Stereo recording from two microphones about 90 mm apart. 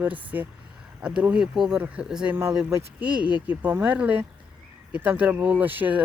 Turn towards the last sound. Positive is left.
turn(degrees=-20)  # may be behind; listen again after turning